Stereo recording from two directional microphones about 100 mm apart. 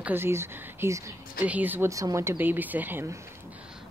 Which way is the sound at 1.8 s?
35° right (ahead or behind).